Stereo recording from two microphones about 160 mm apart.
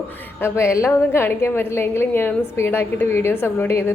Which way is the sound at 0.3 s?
15° left (ahead or behind).